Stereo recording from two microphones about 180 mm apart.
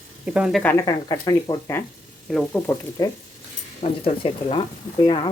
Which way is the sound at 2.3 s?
5° left (ahead or behind).